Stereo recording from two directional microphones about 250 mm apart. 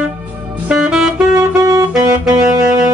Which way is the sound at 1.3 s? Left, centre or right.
Centre.